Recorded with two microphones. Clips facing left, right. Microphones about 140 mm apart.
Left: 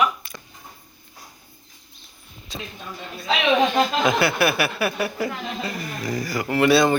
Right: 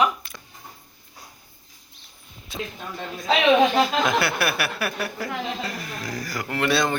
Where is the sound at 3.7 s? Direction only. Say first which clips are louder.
Left 1 dB; centre (ahead or behind).